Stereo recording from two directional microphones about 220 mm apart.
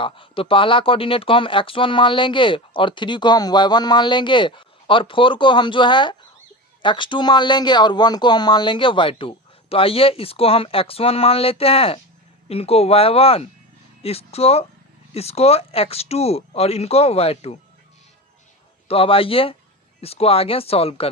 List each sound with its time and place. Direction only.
0.0 s speech: 25° left (ahead or behind)
18.9 s speech: 25° left (ahead or behind)